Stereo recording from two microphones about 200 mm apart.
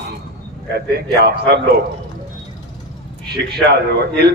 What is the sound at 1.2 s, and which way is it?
Speech, 50° right (ahead or behind).